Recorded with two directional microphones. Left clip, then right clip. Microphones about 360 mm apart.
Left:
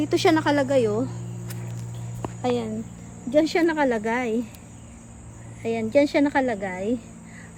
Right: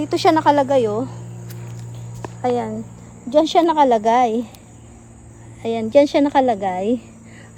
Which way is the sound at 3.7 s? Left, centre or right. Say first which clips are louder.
Right 8 dB; right.